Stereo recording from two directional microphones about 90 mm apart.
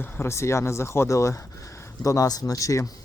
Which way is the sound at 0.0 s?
25° left (ahead or behind).